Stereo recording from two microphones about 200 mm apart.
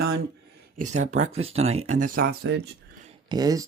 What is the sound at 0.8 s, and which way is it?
Speech, 35° right (ahead or behind).